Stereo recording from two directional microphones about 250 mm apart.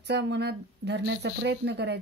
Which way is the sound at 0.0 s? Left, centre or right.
Right.